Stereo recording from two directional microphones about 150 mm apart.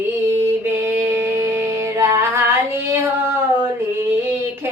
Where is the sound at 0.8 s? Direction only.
15° right (ahead or behind).